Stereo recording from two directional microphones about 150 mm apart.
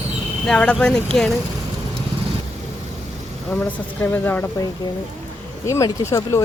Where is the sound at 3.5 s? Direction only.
15° left (ahead or behind).